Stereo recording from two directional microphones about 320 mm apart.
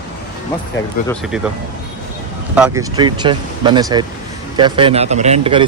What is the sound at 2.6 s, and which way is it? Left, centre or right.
Speech, centre.